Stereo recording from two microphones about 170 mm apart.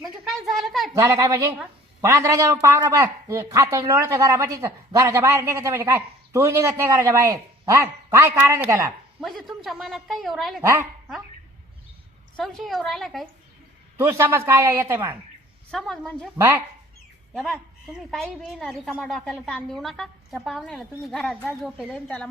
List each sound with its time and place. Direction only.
0.0 s a sound: centre (ahead or behind)
0.9 s a man's voice: 20° right (ahead or behind)
9.2 s a woman's voice: centre (ahead or behind)
12.4 s a woman's voice: centre (ahead or behind)
13.9 s a man's voice: 15° right (ahead or behind)
15.7 s a woman's voice: 5° left (ahead or behind)
16.4 s a man's voice: 10° right (ahead or behind)
17.3 s a woman's voice: centre (ahead or behind)